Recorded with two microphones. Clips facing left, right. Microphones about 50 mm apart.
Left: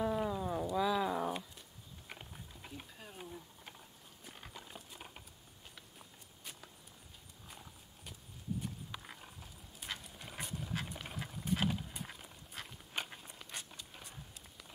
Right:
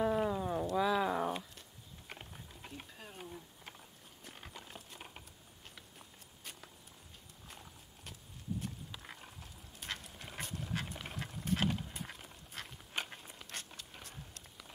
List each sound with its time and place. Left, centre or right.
0.0 s dog: centre
0.7 s a sound: centre
5.8 s clip-clop: centre
7.4 s horse: centre
9.0 s clip-clop: centre
14.0 s a sound: centre